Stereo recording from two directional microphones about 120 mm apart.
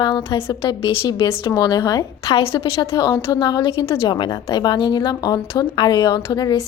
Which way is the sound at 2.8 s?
25° left (ahead or behind).